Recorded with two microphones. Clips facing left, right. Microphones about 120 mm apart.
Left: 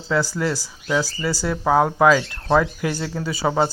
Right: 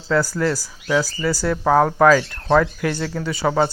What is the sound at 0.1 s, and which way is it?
Speech, 15° left (ahead or behind).